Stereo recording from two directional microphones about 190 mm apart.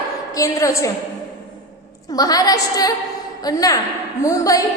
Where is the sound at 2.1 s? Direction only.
20° left (ahead or behind).